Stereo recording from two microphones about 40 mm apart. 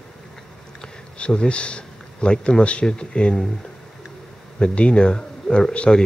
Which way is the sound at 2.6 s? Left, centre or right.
Left.